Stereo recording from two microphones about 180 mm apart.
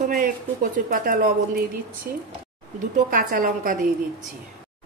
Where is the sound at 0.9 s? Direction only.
50° right (ahead or behind).